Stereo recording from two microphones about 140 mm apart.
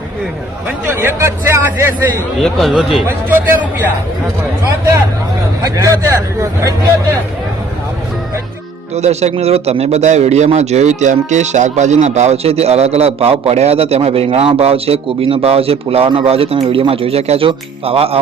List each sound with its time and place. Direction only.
0.9 s speech: 20° right (ahead or behind)
2.4 s speech: centre (ahead or behind)
3.2 s speech: 15° right (ahead or behind)
5.7 s speech: 25° right (ahead or behind)
9.0 s a man's voice: 50° right (ahead or behind)